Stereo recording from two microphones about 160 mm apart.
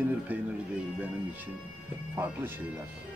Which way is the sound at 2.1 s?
15° right (ahead or behind).